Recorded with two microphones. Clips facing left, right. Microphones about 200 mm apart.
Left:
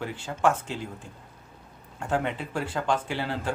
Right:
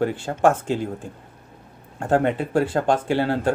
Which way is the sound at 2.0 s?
50° right (ahead or behind).